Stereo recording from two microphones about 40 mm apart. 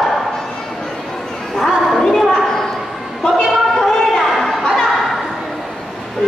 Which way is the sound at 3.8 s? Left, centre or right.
Centre.